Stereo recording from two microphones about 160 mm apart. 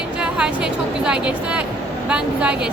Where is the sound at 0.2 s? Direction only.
5° right (ahead or behind).